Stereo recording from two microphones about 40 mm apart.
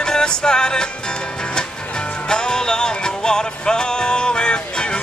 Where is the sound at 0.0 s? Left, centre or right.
Centre.